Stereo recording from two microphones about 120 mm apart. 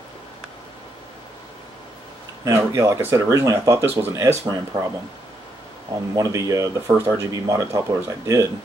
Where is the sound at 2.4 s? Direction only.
25° right (ahead or behind).